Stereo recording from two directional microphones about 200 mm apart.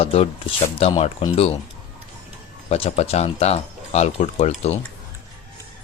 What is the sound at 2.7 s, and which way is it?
Speech, 30° left (ahead or behind).